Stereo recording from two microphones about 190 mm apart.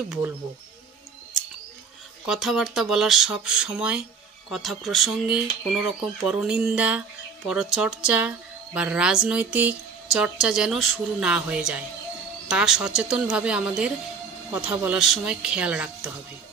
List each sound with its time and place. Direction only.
2.2 s speech: centre (ahead or behind)